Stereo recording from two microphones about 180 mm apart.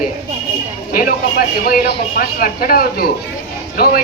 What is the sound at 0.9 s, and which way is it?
Speech, 55° left (ahead or behind).